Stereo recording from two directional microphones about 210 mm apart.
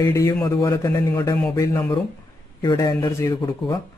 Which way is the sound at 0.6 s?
15° left (ahead or behind).